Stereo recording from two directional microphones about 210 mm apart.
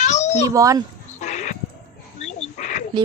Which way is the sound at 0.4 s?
15° right (ahead or behind).